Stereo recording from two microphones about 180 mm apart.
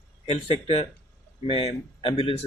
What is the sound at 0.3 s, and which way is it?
Speech, 30° left (ahead or behind).